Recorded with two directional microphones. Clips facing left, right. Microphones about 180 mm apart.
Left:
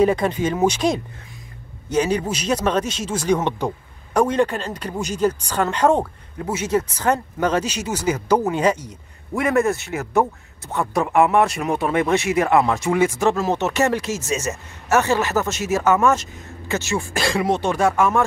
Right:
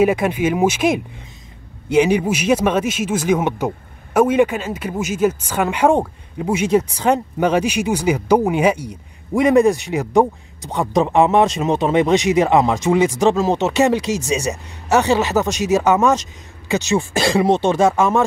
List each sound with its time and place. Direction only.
0.0 s speech: 10° right (ahead or behind)